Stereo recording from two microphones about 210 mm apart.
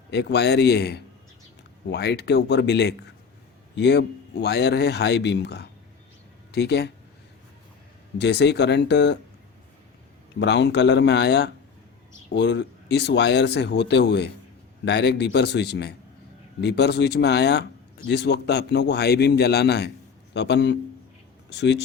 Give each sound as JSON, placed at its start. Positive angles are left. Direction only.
{"t": 0.1, "sound": "speech", "side_deg": 55}
{"t": 8.2, "sound": "speech", "side_deg": 55}
{"t": 10.4, "sound": "speech", "side_deg": 55}